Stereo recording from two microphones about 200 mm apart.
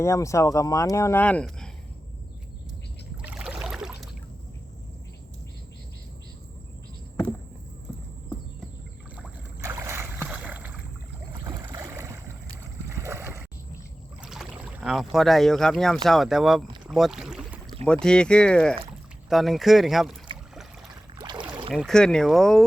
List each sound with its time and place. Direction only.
0.0 s speech: 15° left (ahead or behind)
3.2 s a sound: 5° right (ahead or behind)
9.1 s boat: 10° right (ahead or behind)
14.2 s rowboat: 5° right (ahead or behind)
16.0 s speech: centre (ahead or behind)
21.2 s boat: 20° right (ahead or behind)
21.7 s speech: centre (ahead or behind)